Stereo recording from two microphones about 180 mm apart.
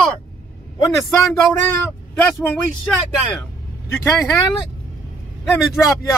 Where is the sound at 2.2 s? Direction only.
10° left (ahead or behind).